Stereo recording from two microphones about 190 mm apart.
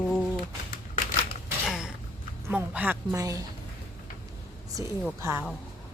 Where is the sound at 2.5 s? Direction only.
10° right (ahead or behind).